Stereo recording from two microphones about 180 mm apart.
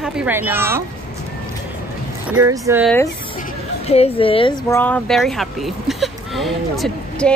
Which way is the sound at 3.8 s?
35° left (ahead or behind).